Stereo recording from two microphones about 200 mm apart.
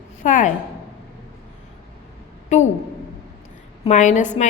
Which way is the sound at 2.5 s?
35° left (ahead or behind).